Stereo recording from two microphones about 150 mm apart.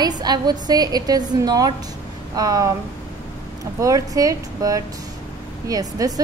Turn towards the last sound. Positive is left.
turn(degrees=-25)  # may be behind; listen again after turning